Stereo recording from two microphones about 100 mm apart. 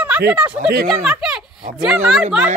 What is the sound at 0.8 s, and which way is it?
Speech, 5° right (ahead or behind).